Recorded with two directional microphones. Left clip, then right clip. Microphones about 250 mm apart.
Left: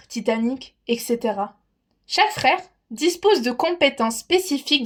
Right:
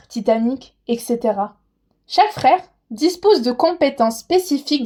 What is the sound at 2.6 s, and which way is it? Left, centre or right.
Speech, left.